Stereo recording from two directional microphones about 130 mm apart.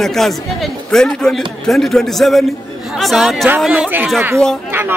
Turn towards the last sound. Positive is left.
turn(degrees=-15)  # may be behind; listen again after turning